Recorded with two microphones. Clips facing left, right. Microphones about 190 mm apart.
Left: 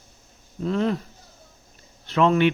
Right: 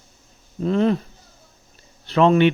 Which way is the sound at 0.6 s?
25° right (ahead or behind).